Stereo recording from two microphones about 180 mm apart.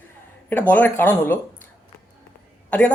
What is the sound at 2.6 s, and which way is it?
Speech, 5° left (ahead or behind).